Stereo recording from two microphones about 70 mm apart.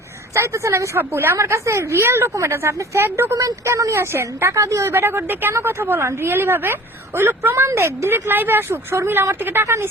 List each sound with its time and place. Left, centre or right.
0.3 s a woman's voice: right